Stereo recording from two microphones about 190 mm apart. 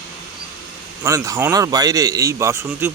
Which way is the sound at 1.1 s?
15° right (ahead or behind).